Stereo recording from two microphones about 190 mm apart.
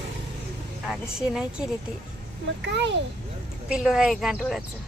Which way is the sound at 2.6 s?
65° right (ahead or behind).